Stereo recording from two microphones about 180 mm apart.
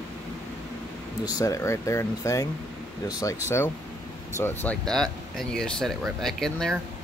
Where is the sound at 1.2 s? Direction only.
20° left (ahead or behind); by 6.7 s centre (ahead or behind).